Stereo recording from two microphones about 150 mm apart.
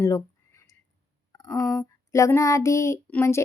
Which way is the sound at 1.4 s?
20° left (ahead or behind).